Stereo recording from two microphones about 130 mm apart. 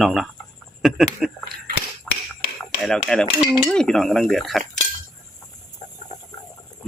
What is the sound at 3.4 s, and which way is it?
Cutlery, 25° left (ahead or behind).